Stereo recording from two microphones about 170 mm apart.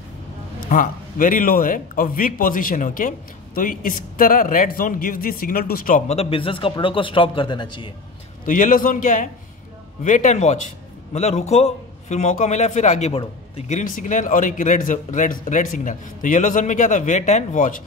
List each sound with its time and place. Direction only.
0.7 s a man's voice: 50° left (ahead or behind); by 7.9 s 30° left (ahead or behind)
8.5 s a man's voice: 55° left (ahead or behind)